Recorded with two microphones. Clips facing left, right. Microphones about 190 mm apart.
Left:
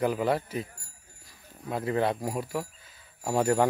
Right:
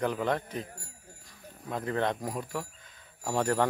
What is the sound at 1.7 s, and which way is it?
Speech, 10° left (ahead or behind).